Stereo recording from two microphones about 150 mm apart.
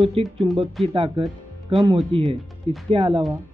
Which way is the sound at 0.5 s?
40° right (ahead or behind).